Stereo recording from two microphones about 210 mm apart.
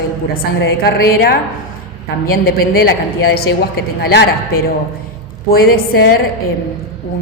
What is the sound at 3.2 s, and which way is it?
A woman's voice, 50° left (ahead or behind).